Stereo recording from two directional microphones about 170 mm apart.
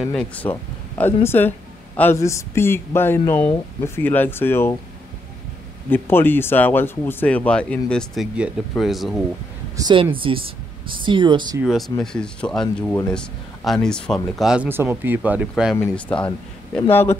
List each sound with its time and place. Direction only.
0.0 s speech: 10° left (ahead or behind)
5.9 s speech: 10° left (ahead or behind)
9.8 s speech: 25° right (ahead or behind)
11.6 s speech: centre (ahead or behind)
16.2 s speech: 5° left (ahead or behind)